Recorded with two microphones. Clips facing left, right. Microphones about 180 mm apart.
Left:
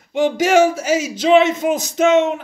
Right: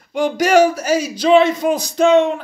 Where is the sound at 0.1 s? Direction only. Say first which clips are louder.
Even; 20° left (ahead or behind).